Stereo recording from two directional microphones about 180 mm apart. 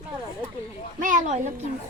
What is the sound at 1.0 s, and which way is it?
Speech, 45° right (ahead or behind).